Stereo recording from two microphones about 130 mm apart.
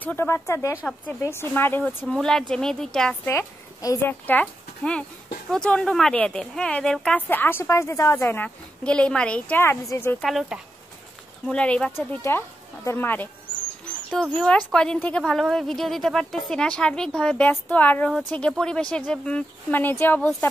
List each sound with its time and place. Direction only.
0.0 s speech: 15° left (ahead or behind)
2.0 s a woman's voice: 5° left (ahead or behind)
3.3 s a woman's voice: 25° left (ahead or behind)
10.2 s a woman's voice: centre (ahead or behind)
12.2 s speech: 20° left (ahead or behind)